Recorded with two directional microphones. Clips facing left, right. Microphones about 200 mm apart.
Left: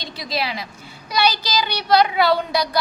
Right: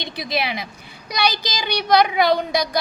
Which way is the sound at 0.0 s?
20° right (ahead or behind).